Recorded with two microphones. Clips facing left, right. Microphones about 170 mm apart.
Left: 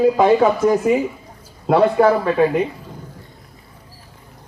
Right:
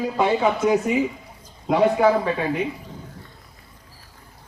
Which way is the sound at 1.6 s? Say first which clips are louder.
Left 4 dB; 55° left (ahead or behind).